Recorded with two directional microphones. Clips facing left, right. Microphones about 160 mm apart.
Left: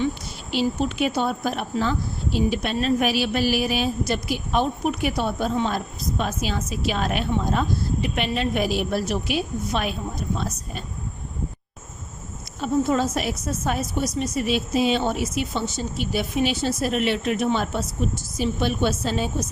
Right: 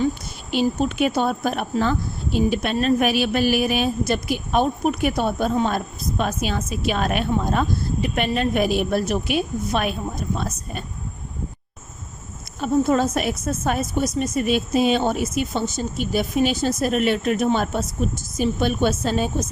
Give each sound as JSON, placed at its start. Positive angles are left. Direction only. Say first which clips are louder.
{"t": 0.5, "sound": "speech", "louder": "right 2 dB", "side_deg": -50}
{"t": 12.6, "sound": "speech", "louder": "right 3 dB", "side_deg": -50}